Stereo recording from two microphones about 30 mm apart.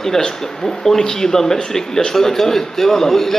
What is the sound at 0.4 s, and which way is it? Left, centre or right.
A man's voice, centre.